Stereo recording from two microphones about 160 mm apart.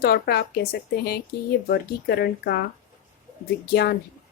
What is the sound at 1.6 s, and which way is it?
Speech, 85° left.